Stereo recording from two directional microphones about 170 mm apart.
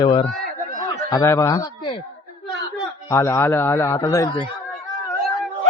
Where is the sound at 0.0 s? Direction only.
25° left (ahead or behind).